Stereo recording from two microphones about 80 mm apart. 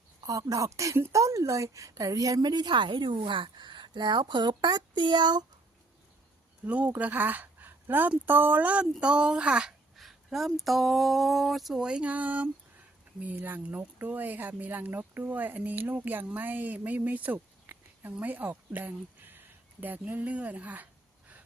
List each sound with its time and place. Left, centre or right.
0.2 s a woman's voice: right
6.7 s speech: centre
9.9 s speech: centre